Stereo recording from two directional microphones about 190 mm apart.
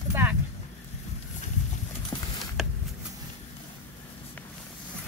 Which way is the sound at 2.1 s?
20° left (ahead or behind).